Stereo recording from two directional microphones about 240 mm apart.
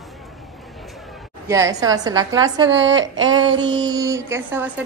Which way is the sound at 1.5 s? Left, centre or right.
Centre.